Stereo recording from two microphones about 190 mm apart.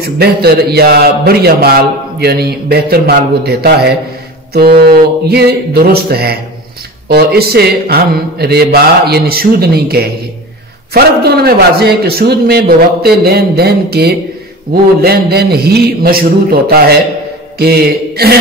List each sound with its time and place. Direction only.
0.0 s a man's voice: 55° right (ahead or behind)